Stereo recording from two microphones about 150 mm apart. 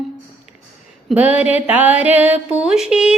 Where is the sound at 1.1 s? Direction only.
10° right (ahead or behind).